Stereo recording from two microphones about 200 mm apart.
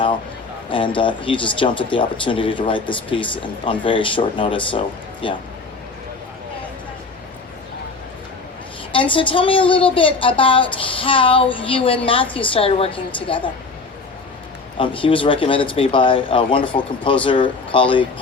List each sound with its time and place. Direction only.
0.7 s a woman's voice: 25° left (ahead or behind)
8.9 s a woman's voice: 25° left (ahead or behind)
14.8 s a woman's voice: 25° left (ahead or behind)